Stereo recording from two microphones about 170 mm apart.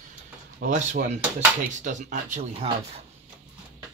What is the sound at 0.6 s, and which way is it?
Speech, 50° right (ahead or behind).